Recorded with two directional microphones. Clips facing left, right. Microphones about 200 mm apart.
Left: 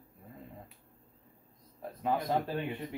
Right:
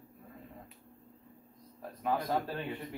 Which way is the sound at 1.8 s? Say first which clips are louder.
Left 1 dB; 25° left (ahead or behind).